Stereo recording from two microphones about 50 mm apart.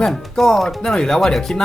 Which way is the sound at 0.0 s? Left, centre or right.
Centre.